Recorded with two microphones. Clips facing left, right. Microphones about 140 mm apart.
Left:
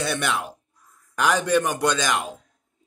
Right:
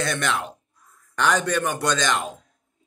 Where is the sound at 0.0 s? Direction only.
10° left (ahead or behind).